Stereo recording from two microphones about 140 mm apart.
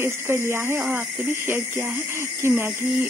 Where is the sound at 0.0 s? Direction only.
15° right (ahead or behind).